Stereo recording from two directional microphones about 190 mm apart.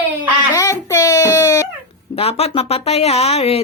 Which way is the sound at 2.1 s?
30° left (ahead or behind).